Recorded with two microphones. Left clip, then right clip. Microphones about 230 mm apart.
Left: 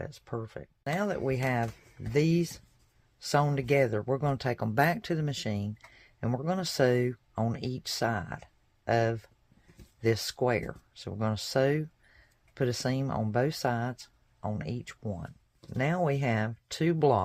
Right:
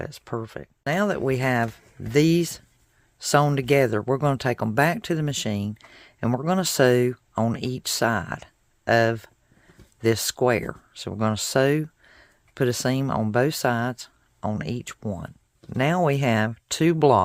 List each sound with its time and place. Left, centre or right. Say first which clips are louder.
0.0 s speech: right 7 dB; right